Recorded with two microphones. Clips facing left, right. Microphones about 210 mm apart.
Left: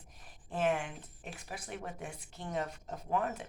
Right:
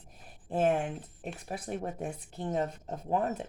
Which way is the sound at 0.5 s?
30° right (ahead or behind).